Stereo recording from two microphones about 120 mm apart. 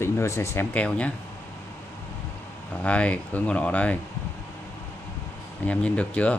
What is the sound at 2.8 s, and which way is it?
Speech, 10° left (ahead or behind).